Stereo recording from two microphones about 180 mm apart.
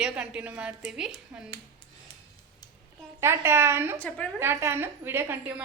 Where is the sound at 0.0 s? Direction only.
5° right (ahead or behind).